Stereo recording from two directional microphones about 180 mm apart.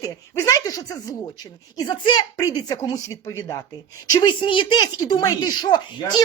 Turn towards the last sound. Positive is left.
turn(degrees=25)  # may be behind; listen again after turning